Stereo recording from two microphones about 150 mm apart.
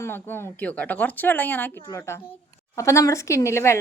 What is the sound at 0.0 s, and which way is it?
Speech, 15° left (ahead or behind).